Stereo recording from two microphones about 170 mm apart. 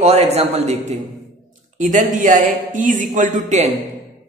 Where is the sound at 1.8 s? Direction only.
50° right (ahead or behind).